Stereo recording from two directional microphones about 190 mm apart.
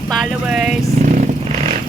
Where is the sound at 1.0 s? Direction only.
40° right (ahead or behind).